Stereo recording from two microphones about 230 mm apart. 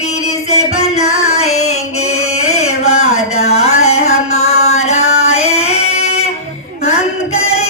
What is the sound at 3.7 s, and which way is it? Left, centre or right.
Music, left.